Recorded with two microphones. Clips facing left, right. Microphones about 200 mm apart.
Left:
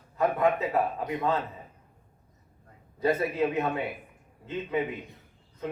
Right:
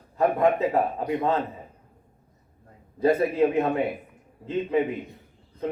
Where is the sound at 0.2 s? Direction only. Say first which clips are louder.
Right 4 dB; 30° right (ahead or behind).